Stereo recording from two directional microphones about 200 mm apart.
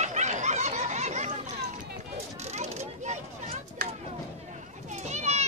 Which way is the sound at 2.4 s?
35° right (ahead or behind).